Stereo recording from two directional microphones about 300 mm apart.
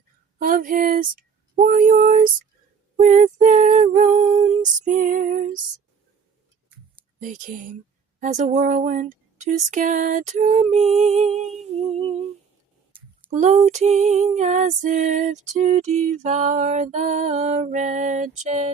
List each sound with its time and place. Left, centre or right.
0.3 s a sound: right
2.9 s female singing: right
7.2 s female singing: right
13.3 s female singing: right